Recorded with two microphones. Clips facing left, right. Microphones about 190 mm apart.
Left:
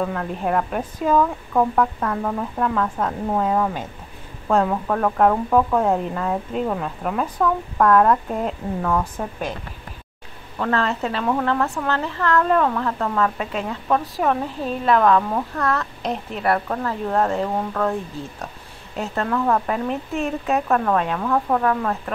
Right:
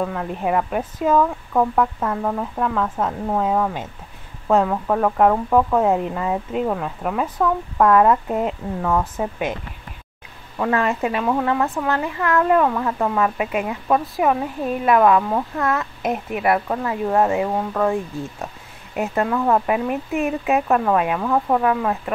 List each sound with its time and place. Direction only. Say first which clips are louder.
0.0 s speech: right 1 dB; 5° right (ahead or behind)
10.6 s speech: right 2 dB; 15° right (ahead or behind)
18.9 s speech: right 2 dB; 15° right (ahead or behind)